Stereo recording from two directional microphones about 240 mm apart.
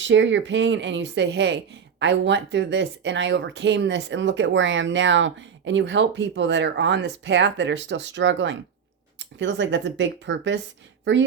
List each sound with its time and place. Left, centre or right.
0.0 s speech: right